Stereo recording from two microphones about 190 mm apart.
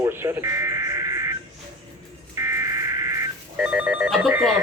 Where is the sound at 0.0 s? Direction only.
10° right (ahead or behind).